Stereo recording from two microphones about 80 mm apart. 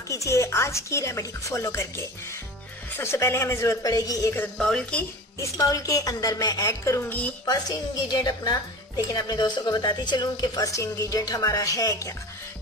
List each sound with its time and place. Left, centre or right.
0.1 s speech: left
4.6 s speech: centre
5.4 s a woman's voice: left
7.0 s a woman's voice: left
8.1 s speech: left